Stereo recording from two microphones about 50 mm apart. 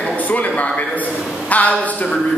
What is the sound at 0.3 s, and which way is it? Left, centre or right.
Speech, left.